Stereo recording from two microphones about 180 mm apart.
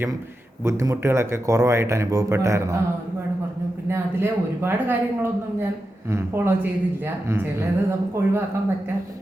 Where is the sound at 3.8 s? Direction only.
15° right (ahead or behind).